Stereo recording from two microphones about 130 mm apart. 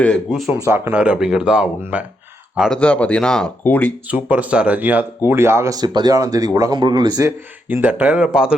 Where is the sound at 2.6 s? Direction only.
5° left (ahead or behind).